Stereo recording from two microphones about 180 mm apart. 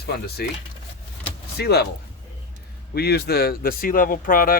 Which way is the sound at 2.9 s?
60° left (ahead or behind).